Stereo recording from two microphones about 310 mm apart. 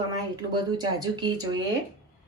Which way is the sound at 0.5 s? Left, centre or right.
Centre.